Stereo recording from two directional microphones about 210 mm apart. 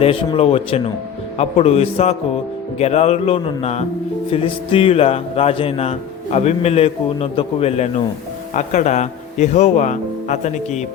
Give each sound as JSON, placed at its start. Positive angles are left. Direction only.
{"t": 0.0, "sound": "a man's voice", "side_deg": 25}